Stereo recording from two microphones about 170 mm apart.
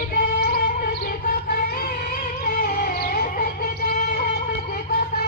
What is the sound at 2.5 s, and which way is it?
Music, 55° left (ahead or behind).